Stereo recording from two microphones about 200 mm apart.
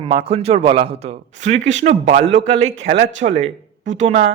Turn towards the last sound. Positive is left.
turn(degrees=-35)  # may be behind; listen again after turning